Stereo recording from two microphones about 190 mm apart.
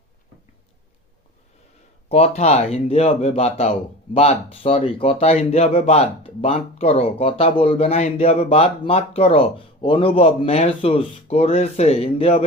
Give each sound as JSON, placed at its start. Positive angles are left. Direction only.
{"t": 2.0, "sound": "speech", "side_deg": 35}